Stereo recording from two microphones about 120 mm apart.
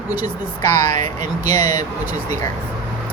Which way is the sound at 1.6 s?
35° left (ahead or behind).